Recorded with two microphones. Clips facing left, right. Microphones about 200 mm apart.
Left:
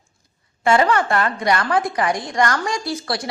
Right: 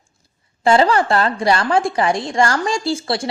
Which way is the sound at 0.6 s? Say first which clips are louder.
Right 3 dB; 30° right (ahead or behind).